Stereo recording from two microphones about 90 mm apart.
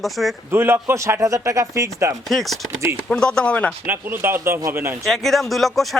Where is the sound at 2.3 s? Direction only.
Centre (ahead or behind).